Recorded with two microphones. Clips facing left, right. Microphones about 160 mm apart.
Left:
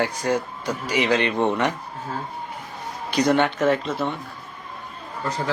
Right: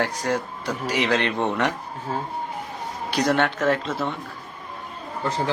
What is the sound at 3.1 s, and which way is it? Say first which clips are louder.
Speech: left 2 dB; centre (ahead or behind).